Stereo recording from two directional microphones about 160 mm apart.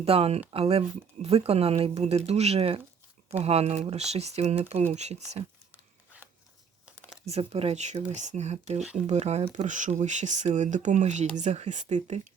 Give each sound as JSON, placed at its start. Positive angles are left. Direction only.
{"t": 0.0, "sound": "speech", "side_deg": -40}
{"t": 7.3, "sound": "speech", "side_deg": -40}